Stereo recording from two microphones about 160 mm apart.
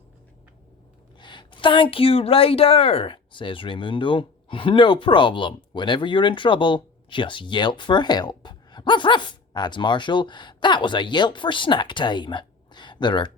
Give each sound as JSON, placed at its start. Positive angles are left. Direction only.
{"t": 1.2, "sound": "a woman's voice", "side_deg": 30}